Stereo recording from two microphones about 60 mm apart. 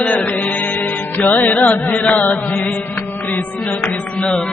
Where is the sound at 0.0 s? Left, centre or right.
Left.